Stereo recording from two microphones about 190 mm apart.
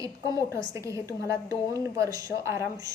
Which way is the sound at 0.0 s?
15° right (ahead or behind).